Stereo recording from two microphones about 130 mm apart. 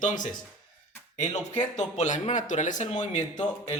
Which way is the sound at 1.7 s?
65° left (ahead or behind).